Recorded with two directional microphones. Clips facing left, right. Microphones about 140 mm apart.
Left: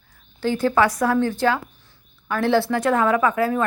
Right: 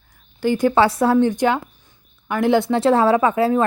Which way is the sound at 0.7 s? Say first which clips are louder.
Right 3 dB; 25° right (ahead or behind).